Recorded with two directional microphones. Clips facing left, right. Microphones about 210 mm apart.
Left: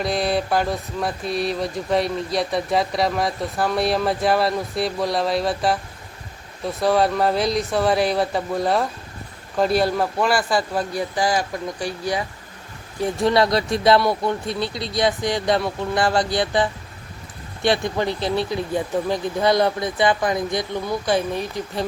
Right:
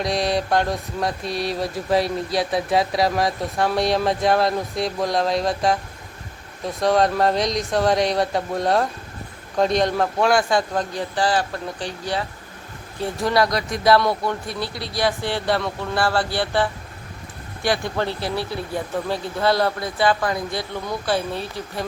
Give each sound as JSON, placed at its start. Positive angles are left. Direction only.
{"t": 0.0, "sound": "speech", "side_deg": 5}
{"t": 6.8, "sound": "a man's voice", "side_deg": 5}
{"t": 13.0, "sound": "a man's voice", "side_deg": 25}